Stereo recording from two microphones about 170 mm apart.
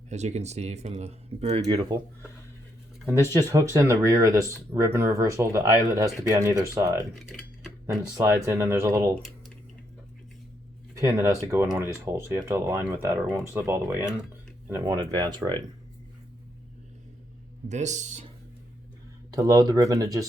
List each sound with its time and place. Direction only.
0.1 s speech: 40° right (ahead or behind)
1.6 s speech: 25° right (ahead or behind)
3.3 s speech: 20° right (ahead or behind)
7.2 s cutlery: centre (ahead or behind)
8.4 s speech: 15° right (ahead or behind)
10.9 s speech: 20° right (ahead or behind)
17.7 s speech: 45° right (ahead or behind)
19.4 s speech: 20° right (ahead or behind)